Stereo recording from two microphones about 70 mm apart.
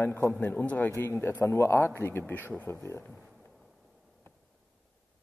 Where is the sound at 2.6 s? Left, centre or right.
Left.